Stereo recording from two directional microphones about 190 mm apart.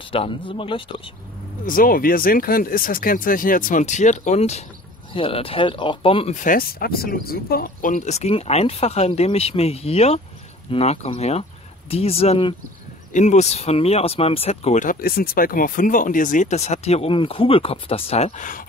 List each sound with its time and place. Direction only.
0.0 s speech: 30° left (ahead or behind)
1.7 s speech: 50° left (ahead or behind)